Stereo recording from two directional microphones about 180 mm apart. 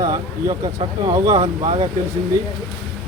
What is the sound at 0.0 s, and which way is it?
Speech, 20° right (ahead or behind).